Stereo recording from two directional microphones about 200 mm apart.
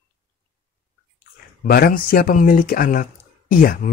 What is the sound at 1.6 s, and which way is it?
Speech, 45° left (ahead or behind).